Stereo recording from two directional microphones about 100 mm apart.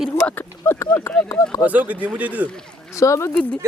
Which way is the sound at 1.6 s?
15° right (ahead or behind).